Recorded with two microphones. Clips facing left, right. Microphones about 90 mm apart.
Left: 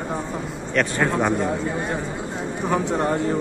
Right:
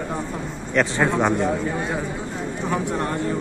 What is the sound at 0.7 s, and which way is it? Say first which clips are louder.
Speech: right 1 dB; 15° right (ahead or behind).